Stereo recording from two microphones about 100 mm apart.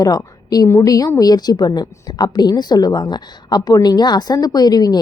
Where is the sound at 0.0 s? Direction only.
40° left (ahead or behind).